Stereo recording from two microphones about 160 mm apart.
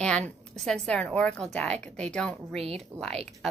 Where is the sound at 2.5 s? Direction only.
40° right (ahead or behind).